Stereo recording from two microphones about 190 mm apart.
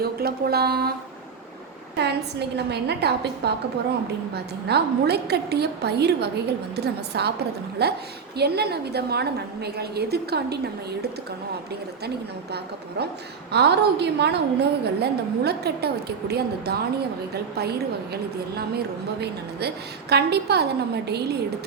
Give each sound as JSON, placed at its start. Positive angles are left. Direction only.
{"t": 0.0, "sound": "a woman's voice", "side_deg": -55}
{"t": 2.6, "sound": "a woman's voice", "side_deg": -60}
{"t": 4.7, "sound": "a woman's voice", "side_deg": -60}
{"t": 12.0, "sound": "a woman's voice", "side_deg": -60}